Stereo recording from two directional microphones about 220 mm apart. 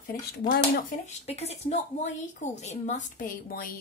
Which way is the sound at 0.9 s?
30° left (ahead or behind).